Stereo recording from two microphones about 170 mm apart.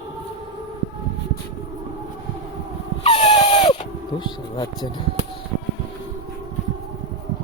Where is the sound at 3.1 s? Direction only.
40° left (ahead or behind).